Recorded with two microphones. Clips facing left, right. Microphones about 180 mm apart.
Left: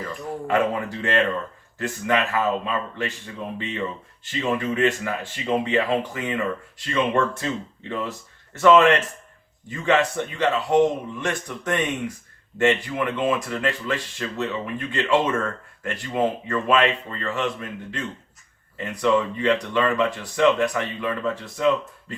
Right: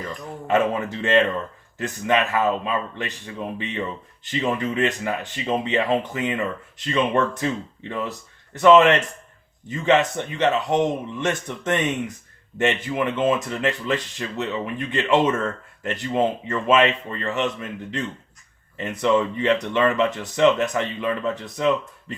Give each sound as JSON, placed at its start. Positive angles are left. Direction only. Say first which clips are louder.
{"t": 0.4, "sound": "speech", "louder": "right 2 dB", "side_deg": -20}
{"t": 3.6, "sound": "speech", "louder": "even", "side_deg": -20}
{"t": 8.5, "sound": "speech", "louder": "right 1 dB", "side_deg": -20}